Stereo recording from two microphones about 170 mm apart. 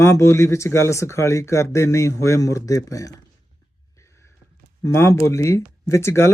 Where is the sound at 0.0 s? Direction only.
15° left (ahead or behind).